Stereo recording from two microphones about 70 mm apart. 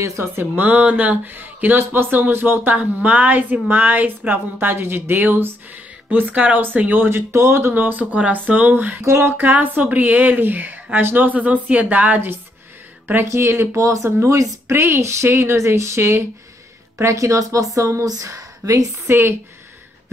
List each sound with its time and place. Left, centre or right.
0.0 s speech: right
0.4 s speech: right
7.1 s speech: right
9.0 s speech: right
9.4 s speech: right
13.0 s speech: right
18.0 s speech: right
19.0 s speech: right